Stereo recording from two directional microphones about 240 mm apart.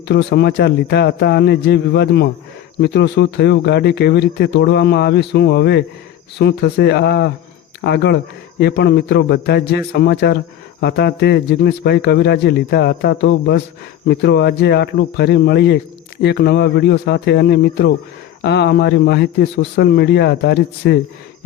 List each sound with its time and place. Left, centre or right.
0.1 s speech: left